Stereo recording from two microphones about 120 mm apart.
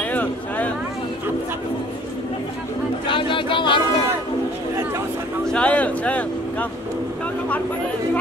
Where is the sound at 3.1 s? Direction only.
45° left (ahead or behind).